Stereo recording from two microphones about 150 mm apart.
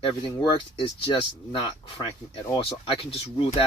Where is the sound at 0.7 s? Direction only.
35° left (ahead or behind).